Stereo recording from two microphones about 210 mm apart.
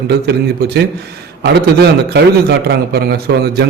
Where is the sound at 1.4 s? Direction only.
55° right (ahead or behind).